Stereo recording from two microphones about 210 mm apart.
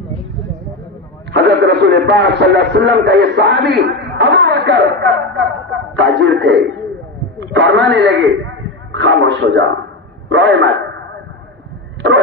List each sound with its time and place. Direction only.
1.3 s a man's voice: 55° right (ahead or behind)